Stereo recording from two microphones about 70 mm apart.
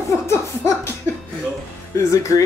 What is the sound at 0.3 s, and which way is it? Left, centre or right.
Music, left.